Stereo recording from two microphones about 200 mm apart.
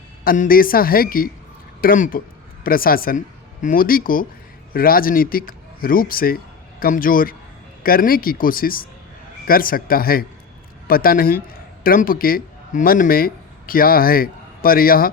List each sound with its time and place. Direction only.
0.3 s a man's voice: 45° left (ahead or behind)